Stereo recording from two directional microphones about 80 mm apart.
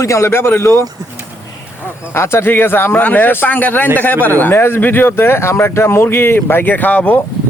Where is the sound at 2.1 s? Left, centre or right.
Left.